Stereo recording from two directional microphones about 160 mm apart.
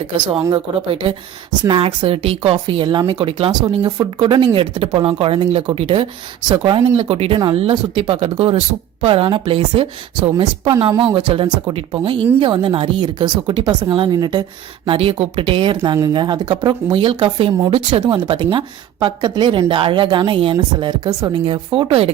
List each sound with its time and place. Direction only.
0.5 s speech: 30° right (ahead or behind)
15.8 s speech: 20° right (ahead or behind)
21.3 s speech: 35° right (ahead or behind)